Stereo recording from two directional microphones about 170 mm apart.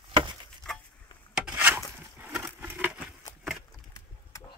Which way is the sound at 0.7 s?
5° left (ahead or behind).